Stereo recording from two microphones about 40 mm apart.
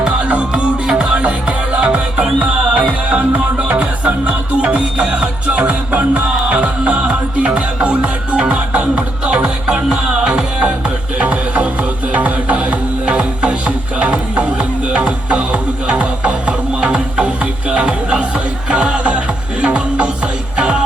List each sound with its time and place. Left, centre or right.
0.0 s music: right